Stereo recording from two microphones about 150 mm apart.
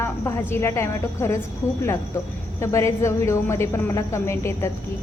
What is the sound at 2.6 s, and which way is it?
A woman's voice, 20° left (ahead or behind).